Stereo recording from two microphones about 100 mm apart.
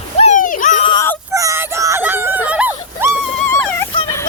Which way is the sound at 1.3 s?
35° right (ahead or behind).